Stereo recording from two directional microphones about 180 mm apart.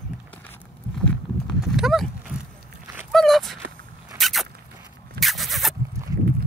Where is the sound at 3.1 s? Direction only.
Centre (ahead or behind).